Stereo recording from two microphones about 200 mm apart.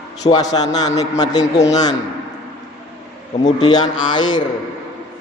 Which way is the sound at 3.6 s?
20° left (ahead or behind).